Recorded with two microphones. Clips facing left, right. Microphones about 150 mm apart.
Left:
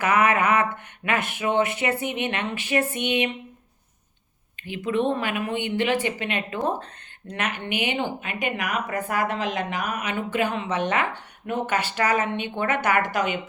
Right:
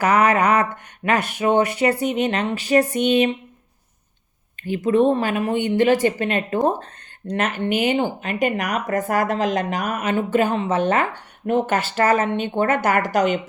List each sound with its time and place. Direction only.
0.0 s speech: 35° right (ahead or behind)
4.6 s speech: 40° right (ahead or behind)